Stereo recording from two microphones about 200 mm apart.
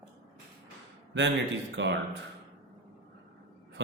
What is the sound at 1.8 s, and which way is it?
Speech, 65° right (ahead or behind).